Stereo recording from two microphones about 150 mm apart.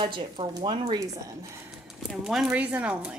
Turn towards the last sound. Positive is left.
turn(degrees=-5)  # may be behind; listen again after turning